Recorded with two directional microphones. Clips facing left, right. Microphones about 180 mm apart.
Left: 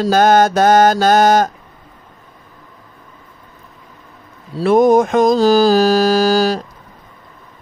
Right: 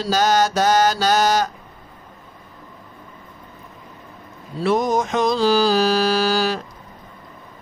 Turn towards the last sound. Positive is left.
turn(degrees=40)  # may be behind; listen again after turning